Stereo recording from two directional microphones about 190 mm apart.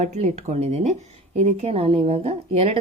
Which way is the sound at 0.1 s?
35° right (ahead or behind).